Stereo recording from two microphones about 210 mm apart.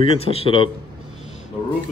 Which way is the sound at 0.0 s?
25° left (ahead or behind).